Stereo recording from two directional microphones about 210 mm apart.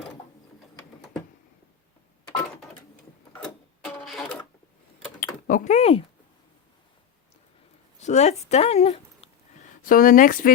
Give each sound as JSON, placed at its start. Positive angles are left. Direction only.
{"t": 2.2, "sound": "a sound", "side_deg": 15}
{"t": 3.4, "sound": "music", "side_deg": 5}
{"t": 5.2, "sound": "mechanisms", "side_deg": 40}
{"t": 8.0, "sound": "speech", "side_deg": 35}
{"t": 9.8, "sound": "speech", "side_deg": 40}